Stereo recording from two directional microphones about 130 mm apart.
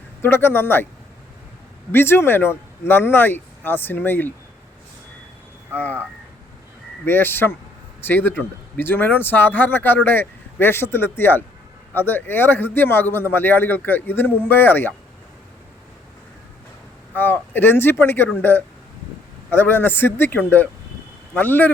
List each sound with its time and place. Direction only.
0.2 s speech: 15° left (ahead or behind)
1.9 s speech: 15° left (ahead or behind)
5.7 s speech: 15° left (ahead or behind)
7.0 s speech: 15° left (ahead or behind)
17.2 s speech: 15° left (ahead or behind)
19.5 s speech: 15° left (ahead or behind)